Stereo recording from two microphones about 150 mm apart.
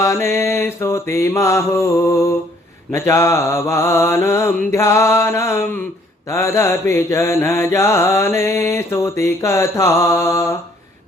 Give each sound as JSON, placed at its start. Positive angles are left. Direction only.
{"t": 0.0, "sound": "mantra", "side_deg": 20}